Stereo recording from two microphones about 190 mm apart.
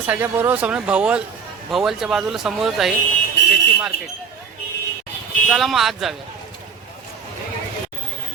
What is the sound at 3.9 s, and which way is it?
Speech, 60° left (ahead or behind).